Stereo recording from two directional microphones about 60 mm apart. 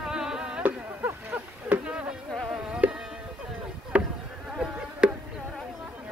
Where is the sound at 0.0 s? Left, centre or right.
Centre.